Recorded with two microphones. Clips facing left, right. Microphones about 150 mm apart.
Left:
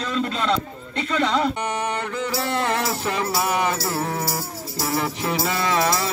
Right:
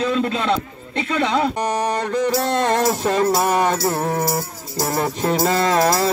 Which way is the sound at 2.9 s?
45° right (ahead or behind).